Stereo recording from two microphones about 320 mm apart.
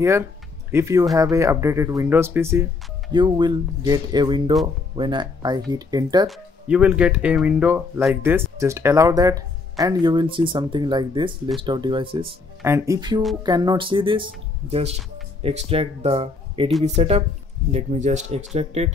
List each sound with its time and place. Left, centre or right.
0.7 s speech: centre
6.2 s speech: centre